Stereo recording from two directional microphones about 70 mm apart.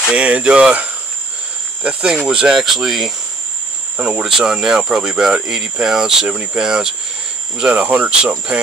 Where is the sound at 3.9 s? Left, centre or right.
Centre.